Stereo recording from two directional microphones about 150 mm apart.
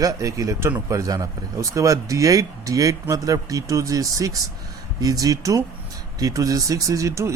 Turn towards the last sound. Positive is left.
turn(degrees=-20)  # may be behind; listen again after turning